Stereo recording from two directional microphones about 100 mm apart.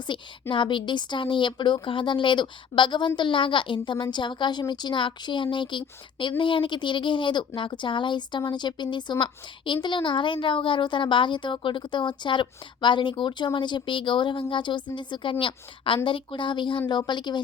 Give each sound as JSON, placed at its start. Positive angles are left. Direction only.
{"t": 0.1, "sound": "a woman's voice", "side_deg": 55}